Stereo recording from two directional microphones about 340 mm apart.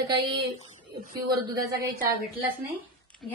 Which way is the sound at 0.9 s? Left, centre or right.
Right.